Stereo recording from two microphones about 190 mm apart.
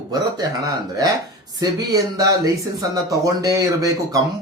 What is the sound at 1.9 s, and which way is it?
Speech, 20° right (ahead or behind).